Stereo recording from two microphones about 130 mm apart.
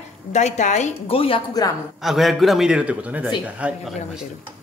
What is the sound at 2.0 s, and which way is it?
A man's voice, centre (ahead or behind).